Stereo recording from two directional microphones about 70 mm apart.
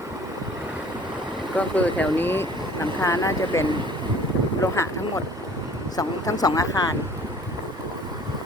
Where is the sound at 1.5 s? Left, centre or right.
Centre.